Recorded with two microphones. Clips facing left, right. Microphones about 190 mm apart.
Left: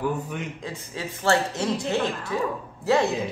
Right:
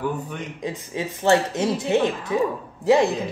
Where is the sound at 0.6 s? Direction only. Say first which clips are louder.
Right 5 dB; 20° right (ahead or behind).